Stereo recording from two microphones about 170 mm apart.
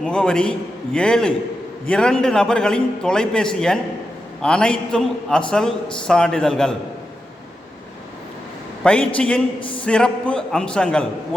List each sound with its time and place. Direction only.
0.0 s a man's voice: 5° left (ahead or behind)
8.8 s a man's voice: 5° left (ahead or behind)
9.6 s speech: 30° left (ahead or behind)
9.8 s a man's voice: 5° left (ahead or behind)